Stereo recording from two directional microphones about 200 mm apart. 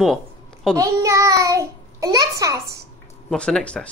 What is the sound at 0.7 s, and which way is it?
A child's voice, 15° right (ahead or behind).